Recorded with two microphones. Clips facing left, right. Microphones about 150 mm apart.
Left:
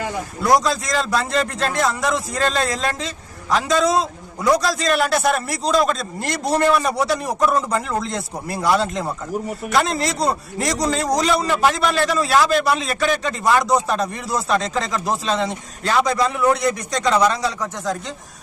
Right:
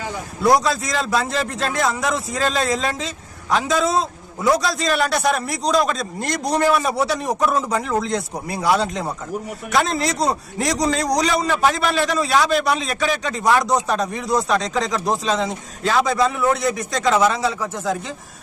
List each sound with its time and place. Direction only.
0.4 s a man's voice: centre (ahead or behind)